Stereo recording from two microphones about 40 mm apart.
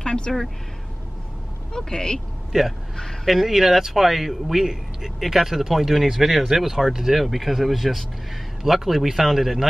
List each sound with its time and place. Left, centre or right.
0.0 s a sound: centre
1.7 s speech: centre
3.3 s speech: centre